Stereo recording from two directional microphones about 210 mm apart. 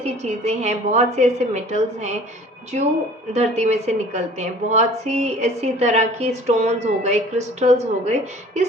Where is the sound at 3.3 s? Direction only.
30° right (ahead or behind).